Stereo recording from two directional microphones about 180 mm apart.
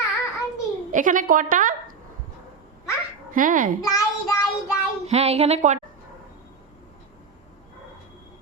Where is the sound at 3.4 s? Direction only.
50° right (ahead or behind).